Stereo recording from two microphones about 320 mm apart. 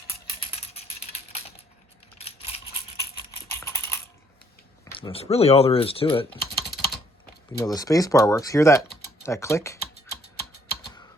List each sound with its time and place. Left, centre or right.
3.6 s typing: centre
4.9 s speech: centre
6.6 s typing: left
7.5 s speech: centre
9.7 s typing: left